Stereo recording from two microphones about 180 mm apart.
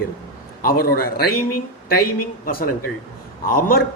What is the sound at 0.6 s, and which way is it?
Speech, 55° left (ahead or behind).